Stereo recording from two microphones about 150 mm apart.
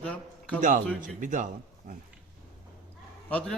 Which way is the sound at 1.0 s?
60° right (ahead or behind).